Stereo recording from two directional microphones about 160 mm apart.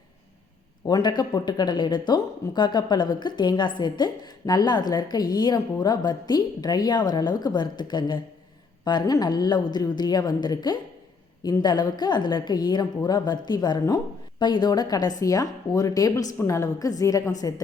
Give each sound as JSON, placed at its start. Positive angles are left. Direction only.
{"t": 0.9, "sound": "a woman's voice", "side_deg": 25}